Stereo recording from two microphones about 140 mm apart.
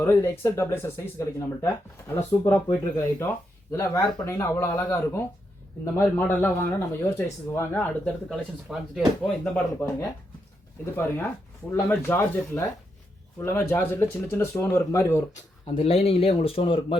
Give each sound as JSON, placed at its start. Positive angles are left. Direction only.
{"t": 0.0, "sound": "speech", "side_deg": 15}
{"t": 4.0, "sound": "speech", "side_deg": 25}
{"t": 8.3, "sound": "speech", "side_deg": -5}
{"t": 9.4, "sound": "speech", "side_deg": 15}
{"t": 11.9, "sound": "speech", "side_deg": 15}
{"t": 15.6, "sound": "speech", "side_deg": 40}